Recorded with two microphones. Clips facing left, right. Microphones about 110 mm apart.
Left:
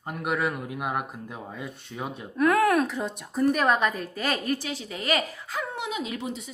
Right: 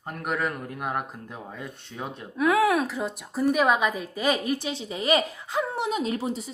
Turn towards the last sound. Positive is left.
turn(degrees=-35)  # may be behind; listen again after turning